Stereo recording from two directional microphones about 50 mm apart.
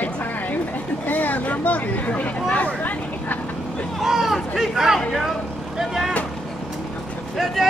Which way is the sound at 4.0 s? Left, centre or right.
Centre.